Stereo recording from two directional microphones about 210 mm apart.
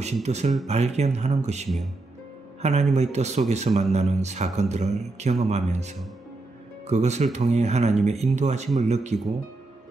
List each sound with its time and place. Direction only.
0.0 s speech: 30° right (ahead or behind)